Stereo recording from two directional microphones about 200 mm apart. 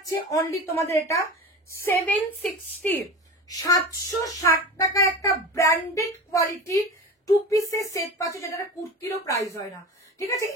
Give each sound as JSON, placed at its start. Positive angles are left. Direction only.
{"t": 0.0, "sound": "a woman's voice", "side_deg": 15}